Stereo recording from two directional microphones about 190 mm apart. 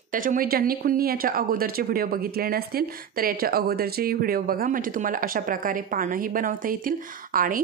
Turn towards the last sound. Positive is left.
turn(degrees=-45)  # may be behind; listen again after turning